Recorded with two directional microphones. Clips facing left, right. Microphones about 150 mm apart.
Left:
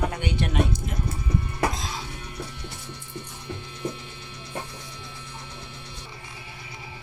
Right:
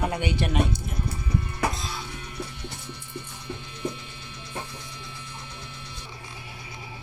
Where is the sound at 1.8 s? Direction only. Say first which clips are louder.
Left 1 dB; 90° left.